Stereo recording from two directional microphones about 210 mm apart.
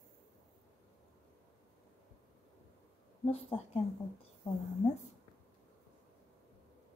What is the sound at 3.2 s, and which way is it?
A woman's voice, 30° left (ahead or behind).